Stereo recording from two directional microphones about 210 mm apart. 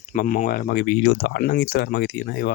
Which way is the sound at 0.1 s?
40° left (ahead or behind).